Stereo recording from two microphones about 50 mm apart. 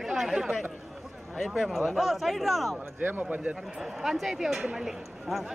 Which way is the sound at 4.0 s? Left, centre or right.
Centre.